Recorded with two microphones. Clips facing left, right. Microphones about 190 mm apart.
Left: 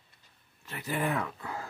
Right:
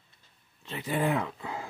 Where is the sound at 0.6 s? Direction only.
25° right (ahead or behind).